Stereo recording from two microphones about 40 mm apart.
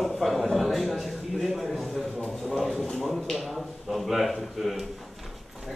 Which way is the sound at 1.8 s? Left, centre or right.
Centre.